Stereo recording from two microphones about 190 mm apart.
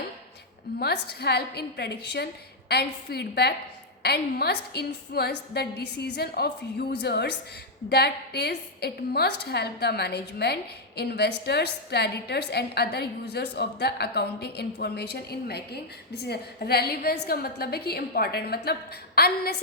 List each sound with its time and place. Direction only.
0.8 s a woman's voice: 55° left (ahead or behind)